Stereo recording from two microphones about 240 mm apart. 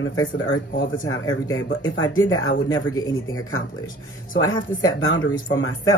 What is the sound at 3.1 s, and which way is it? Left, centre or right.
Speech, left.